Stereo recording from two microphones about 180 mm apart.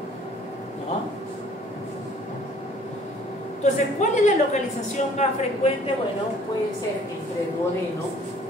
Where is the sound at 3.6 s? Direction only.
40° left (ahead or behind).